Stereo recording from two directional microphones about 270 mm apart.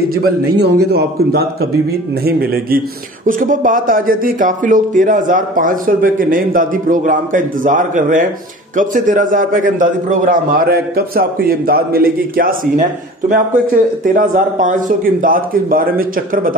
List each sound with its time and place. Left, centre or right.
0.6 s a man's voice: right
14.0 s a man's voice: right